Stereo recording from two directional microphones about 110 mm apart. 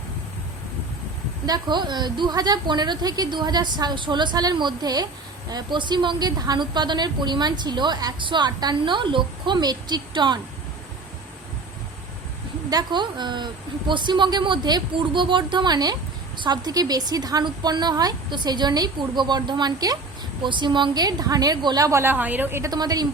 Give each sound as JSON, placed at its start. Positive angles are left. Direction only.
{"t": 1.5, "sound": "a woman's voice", "side_deg": -40}
{"t": 12.7, "sound": "a woman's voice", "side_deg": -45}
{"t": 22.7, "sound": "a woman's voice", "side_deg": -35}